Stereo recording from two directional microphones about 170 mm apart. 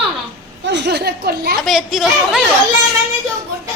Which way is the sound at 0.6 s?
90° right.